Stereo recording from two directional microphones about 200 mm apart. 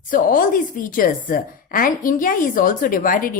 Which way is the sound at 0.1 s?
45° left (ahead or behind).